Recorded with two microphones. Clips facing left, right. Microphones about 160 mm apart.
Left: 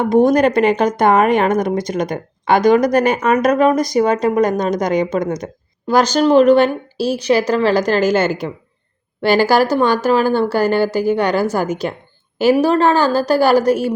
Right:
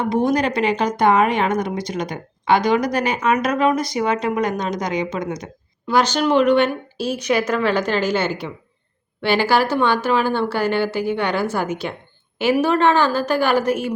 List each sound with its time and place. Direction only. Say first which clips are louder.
0.0 s speech: left 6 dB; 45° left (ahead or behind)